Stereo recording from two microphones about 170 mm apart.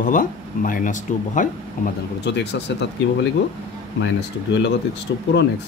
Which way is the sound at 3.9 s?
90° left.